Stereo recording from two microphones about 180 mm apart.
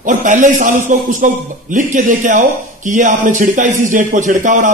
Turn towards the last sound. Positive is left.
turn(degrees=-45)  # may be behind; listen again after turning